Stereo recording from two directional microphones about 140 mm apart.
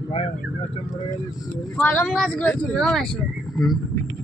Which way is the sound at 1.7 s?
5° left (ahead or behind).